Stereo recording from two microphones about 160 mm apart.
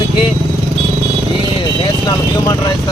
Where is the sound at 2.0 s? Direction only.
25° left (ahead or behind).